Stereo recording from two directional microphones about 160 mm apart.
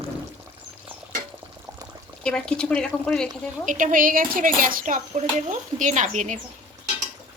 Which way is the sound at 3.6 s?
55° right (ahead or behind).